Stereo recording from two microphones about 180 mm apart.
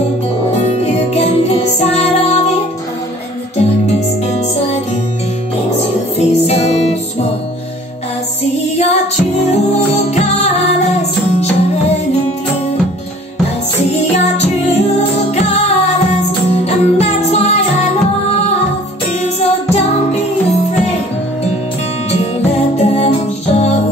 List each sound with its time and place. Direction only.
0.6 s music: 35° left (ahead or behind)
3.5 s music: 35° left (ahead or behind)
6.1 s music: 35° left (ahead or behind)
8.7 s music: 40° left (ahead or behind)
13.9 s music: 35° left (ahead or behind)
19.2 s music: 35° left (ahead or behind)
22.8 s music: 35° left (ahead or behind)